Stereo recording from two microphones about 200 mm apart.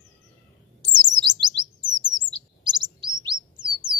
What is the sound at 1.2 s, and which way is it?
Chirp, 20° right (ahead or behind).